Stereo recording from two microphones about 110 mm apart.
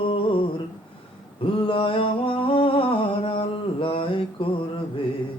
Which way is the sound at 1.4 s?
55° left (ahead or behind).